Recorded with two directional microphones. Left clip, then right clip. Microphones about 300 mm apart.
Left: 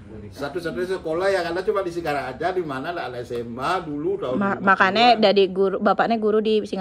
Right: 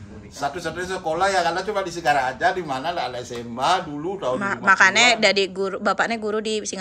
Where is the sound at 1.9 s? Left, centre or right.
Centre.